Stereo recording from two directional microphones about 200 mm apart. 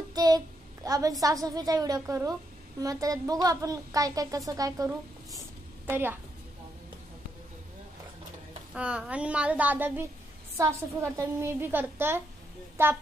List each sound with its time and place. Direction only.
0.1 s child singing: 20° right (ahead or behind)
0.8 s a woman's voice: 15° right (ahead or behind)
8.7 s speech: 5° right (ahead or behind)